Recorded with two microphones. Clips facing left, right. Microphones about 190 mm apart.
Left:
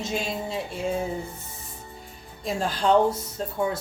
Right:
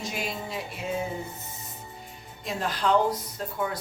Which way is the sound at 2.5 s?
30° left (ahead or behind).